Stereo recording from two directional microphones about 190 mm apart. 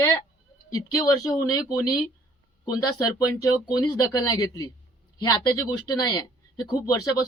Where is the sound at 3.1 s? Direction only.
15° left (ahead or behind).